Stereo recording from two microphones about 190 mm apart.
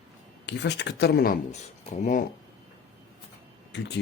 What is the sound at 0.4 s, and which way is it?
Speech, 65° left (ahead or behind).